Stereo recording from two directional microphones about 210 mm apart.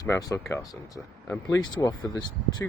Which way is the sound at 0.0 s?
15° left (ahead or behind).